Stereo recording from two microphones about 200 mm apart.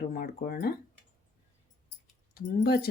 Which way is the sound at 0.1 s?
45° left (ahead or behind).